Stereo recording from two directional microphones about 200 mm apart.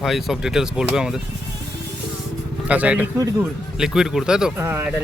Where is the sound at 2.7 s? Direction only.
5° right (ahead or behind).